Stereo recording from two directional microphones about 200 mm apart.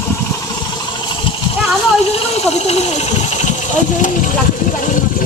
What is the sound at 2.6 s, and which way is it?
Speech, 35° left (ahead or behind).